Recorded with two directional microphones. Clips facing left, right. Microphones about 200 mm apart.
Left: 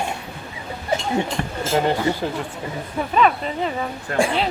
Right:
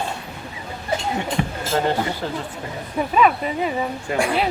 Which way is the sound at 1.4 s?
5° right (ahead or behind).